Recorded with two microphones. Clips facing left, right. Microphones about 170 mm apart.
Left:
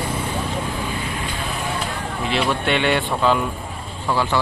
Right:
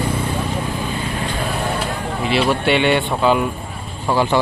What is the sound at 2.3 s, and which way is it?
Speech, 5° right (ahead or behind).